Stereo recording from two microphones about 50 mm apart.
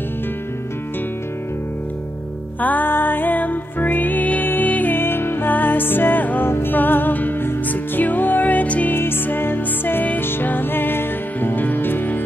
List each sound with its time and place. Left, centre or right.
2.6 s music: left
4.9 s music: left
8.9 s music: left